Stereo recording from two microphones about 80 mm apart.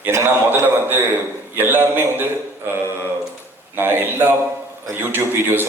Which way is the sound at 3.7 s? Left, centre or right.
Right.